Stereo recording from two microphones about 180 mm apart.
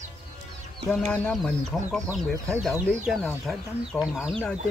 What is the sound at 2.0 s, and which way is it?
Speech, 15° right (ahead or behind).